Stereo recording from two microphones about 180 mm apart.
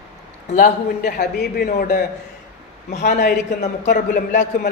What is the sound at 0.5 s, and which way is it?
A man's voice, 45° left (ahead or behind).